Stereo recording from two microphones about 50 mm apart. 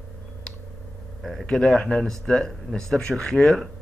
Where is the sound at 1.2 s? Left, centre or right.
Centre.